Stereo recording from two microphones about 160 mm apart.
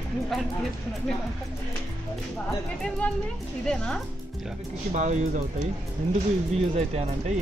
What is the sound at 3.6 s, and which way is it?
Speech, 5° left (ahead or behind).